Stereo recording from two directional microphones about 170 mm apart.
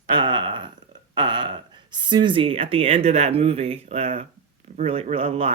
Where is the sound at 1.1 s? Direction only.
25° right (ahead or behind).